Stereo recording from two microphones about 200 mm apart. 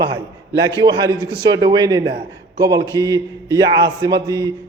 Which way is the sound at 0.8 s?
20° right (ahead or behind).